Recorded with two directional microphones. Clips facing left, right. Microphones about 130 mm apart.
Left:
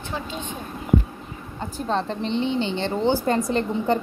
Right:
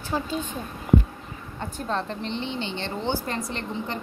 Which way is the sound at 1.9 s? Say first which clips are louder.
Left 5 dB; 30° left (ahead or behind).